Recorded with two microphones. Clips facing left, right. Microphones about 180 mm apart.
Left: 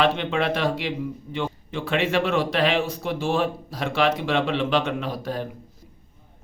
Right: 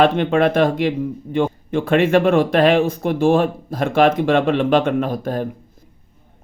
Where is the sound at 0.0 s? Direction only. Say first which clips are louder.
Right 7 dB; 50° right (ahead or behind).